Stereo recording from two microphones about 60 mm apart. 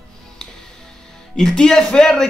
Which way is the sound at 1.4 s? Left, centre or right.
Centre.